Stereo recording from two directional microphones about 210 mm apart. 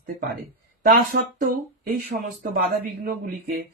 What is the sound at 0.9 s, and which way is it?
Speech, 45° right (ahead or behind).